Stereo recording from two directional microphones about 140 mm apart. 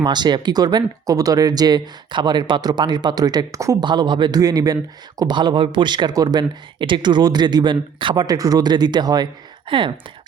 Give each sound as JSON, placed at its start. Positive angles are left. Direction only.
{"t": 0.0, "sound": "speech", "side_deg": -30}